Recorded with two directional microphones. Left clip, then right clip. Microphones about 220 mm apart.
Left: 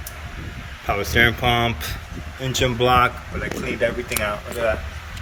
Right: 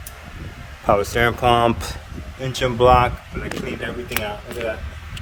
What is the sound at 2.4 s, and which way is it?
Speech, 10° right (ahead or behind).